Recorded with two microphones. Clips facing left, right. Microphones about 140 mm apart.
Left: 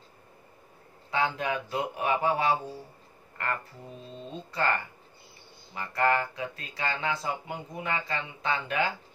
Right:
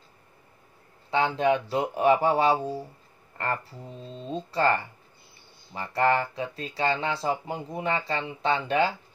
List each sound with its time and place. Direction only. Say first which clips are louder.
1.1 s speech: right 6 dB; 25° right (ahead or behind)
5.8 s speech: right 3 dB; 30° right (ahead or behind)